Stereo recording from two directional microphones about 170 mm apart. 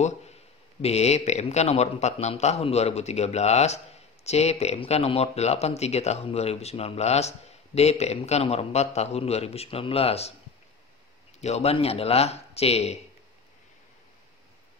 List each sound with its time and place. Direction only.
0.0 s a sound: 40° left (ahead or behind)
0.8 s speech: 40° left (ahead or behind)
11.4 s speech: 40° left (ahead or behind)